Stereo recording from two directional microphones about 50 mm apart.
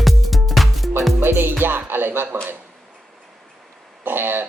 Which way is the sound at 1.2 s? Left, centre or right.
Right.